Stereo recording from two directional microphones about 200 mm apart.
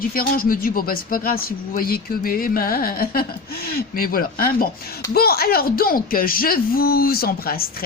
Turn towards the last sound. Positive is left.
turn(degrees=50)  # may be behind; listen again after turning